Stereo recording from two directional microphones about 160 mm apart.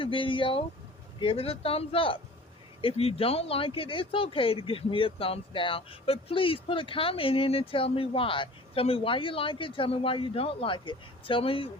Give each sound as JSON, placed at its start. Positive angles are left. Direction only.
{"t": 0.0, "sound": "speech", "side_deg": 30}